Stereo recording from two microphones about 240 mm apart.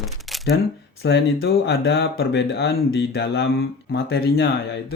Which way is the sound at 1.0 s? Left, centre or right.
Left.